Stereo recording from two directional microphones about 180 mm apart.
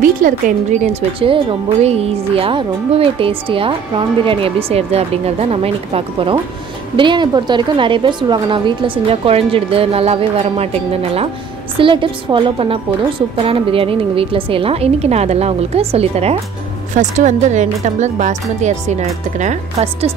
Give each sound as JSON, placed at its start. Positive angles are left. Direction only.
{"t": 0.0, "sound": "a woman's voice", "side_deg": -45}